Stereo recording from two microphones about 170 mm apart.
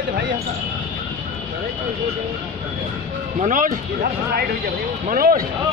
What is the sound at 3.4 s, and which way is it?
Speech, 50° right (ahead or behind).